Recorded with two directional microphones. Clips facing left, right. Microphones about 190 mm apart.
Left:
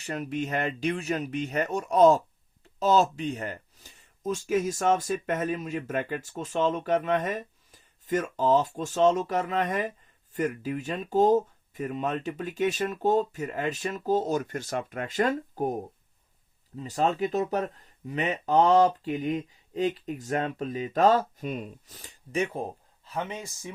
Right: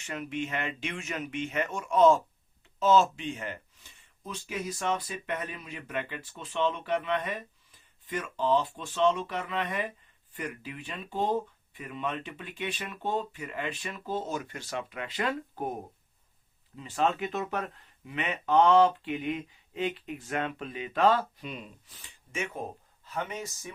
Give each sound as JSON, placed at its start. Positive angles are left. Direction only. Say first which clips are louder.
{"t": 0.0, "sound": "speech", "louder": "left 3 dB", "side_deg": 40}
{"t": 23.1, "sound": "speech", "louder": "left 2 dB", "side_deg": 20}